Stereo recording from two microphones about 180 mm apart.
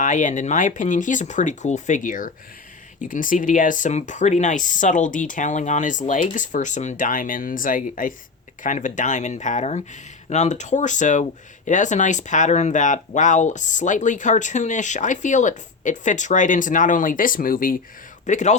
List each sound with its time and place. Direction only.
0.0 s a man's voice: 45° left (ahead or behind)